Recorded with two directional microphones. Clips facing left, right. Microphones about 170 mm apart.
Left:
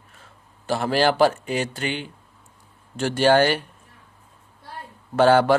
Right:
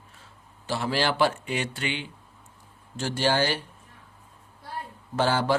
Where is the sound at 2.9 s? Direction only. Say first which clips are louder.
Left 7 dB; 60° left (ahead or behind).